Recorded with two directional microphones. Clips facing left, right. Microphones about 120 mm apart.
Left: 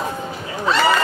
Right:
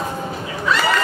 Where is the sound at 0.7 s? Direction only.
30° left (ahead or behind).